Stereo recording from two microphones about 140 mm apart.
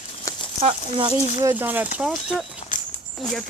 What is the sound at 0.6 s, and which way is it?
Speech, 35° right (ahead or behind).